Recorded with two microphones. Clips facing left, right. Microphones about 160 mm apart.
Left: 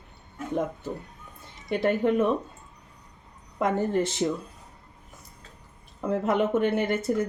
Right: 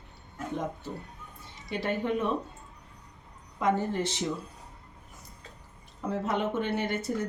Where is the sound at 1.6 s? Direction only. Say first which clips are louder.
Left 6 dB; 50° left (ahead or behind).